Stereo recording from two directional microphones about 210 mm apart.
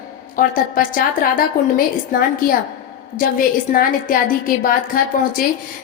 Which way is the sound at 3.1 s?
40° left (ahead or behind).